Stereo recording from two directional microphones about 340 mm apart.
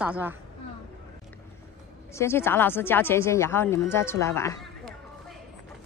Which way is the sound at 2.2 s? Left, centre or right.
Centre.